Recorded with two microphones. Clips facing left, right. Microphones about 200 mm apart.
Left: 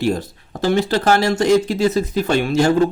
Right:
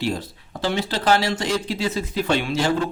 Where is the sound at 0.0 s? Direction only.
45° left (ahead or behind).